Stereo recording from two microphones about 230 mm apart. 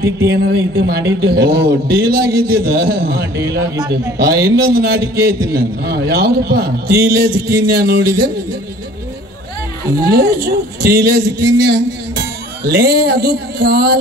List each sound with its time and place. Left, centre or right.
0.3 s a man's voice: right
9.9 s a man's voice: right
12.2 s music: right